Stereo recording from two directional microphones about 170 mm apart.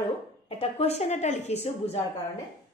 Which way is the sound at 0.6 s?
35° left (ahead or behind).